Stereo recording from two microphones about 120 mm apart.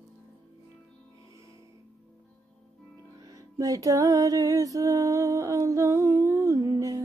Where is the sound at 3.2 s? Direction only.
30° right (ahead or behind).